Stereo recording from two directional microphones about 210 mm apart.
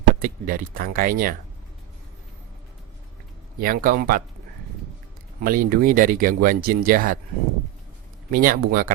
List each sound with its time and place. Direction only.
0.1 s speech: 45° right (ahead or behind)
3.6 s speech: 40° right (ahead or behind)
5.4 s speech: 40° right (ahead or behind)
8.3 s speech: 45° right (ahead or behind)